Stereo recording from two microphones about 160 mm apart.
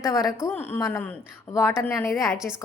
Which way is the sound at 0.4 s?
15° left (ahead or behind).